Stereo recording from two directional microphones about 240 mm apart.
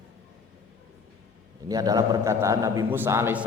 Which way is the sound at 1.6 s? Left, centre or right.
Centre.